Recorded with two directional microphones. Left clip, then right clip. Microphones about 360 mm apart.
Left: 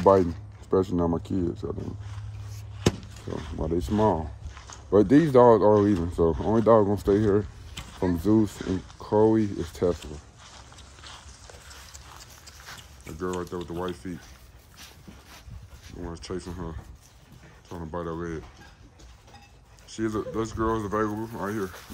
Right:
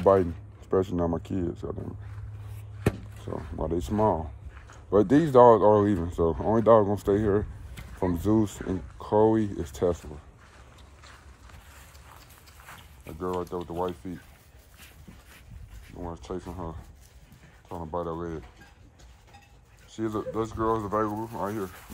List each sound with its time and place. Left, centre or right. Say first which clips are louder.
0.7 s speech: left 2 dB; centre
3.3 s speech: left 1 dB; centre
13.2 s speech: right 1 dB; centre
16.0 s speech: left 1 dB; centre
19.9 s speech: left 1 dB; centre